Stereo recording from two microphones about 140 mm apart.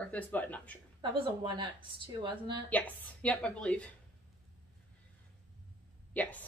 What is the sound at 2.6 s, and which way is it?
A woman's voice, 10° left (ahead or behind).